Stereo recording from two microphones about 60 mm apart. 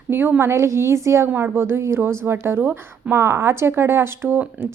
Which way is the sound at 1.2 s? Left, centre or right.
Right.